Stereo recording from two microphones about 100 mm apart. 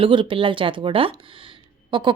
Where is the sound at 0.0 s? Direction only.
55° right (ahead or behind).